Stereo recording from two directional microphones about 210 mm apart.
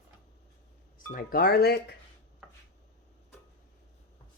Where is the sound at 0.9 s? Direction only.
40° left (ahead or behind).